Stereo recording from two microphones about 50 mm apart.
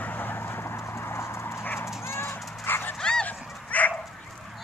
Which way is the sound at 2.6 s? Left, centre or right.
Left.